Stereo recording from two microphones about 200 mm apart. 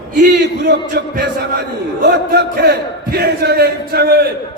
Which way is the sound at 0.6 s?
60° right (ahead or behind).